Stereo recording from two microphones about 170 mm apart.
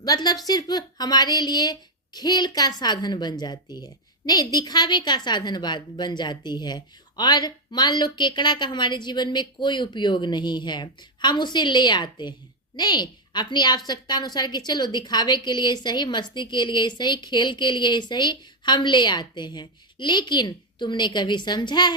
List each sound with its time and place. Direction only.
0.0 s a woman's voice: 25° left (ahead or behind)